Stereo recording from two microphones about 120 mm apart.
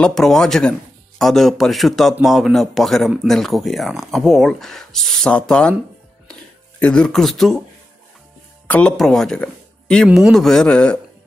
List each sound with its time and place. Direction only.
0.0 s speech: 5° left (ahead or behind)
6.8 s speech: 5° left (ahead or behind)
8.6 s speech: 10° left (ahead or behind)